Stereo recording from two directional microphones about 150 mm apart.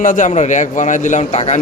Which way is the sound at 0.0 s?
55° left (ahead or behind).